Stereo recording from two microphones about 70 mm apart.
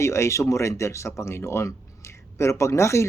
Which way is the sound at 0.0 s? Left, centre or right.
Left.